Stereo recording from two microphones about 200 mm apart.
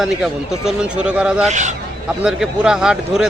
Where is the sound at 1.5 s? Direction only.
35° right (ahead or behind).